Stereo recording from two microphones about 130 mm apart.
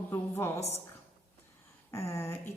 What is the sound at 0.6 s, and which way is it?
Speech, 55° left (ahead or behind).